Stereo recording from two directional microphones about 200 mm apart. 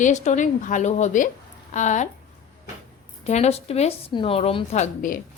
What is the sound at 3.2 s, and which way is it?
A woman's voice, 35° left (ahead or behind).